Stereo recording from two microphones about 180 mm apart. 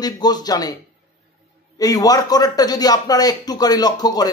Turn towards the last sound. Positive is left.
turn(degrees=20)  # may be behind; listen again after turning